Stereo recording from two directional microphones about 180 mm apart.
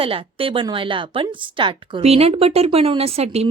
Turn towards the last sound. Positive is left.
turn(degrees=-35)  # may be behind; listen again after turning